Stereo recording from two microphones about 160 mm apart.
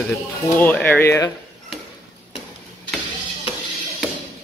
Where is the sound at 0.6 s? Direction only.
10° left (ahead or behind).